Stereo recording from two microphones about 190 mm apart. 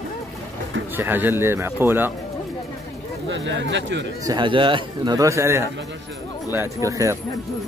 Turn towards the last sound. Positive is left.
turn(degrees=-15)  # may be behind; listen again after turning